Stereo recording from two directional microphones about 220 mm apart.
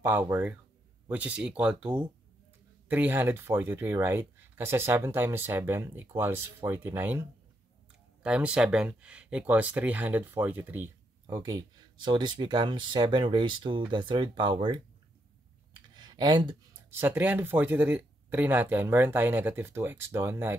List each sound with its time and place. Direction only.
0.0 s speech: 10° right (ahead or behind)
15.9 s speech: 20° right (ahead or behind)